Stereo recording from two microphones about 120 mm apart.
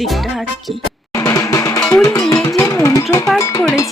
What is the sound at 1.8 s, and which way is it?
Music, 5° left (ahead or behind).